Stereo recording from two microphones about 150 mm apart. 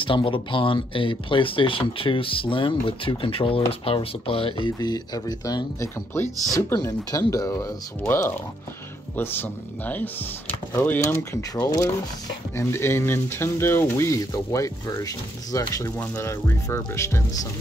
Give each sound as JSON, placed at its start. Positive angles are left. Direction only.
{"t": 0.0, "sound": "speech", "side_deg": 35}
{"t": 11.5, "sound": "speech", "side_deg": 20}